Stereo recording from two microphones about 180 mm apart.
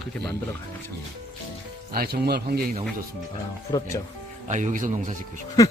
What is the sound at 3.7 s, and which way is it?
Speech, 20° left (ahead or behind).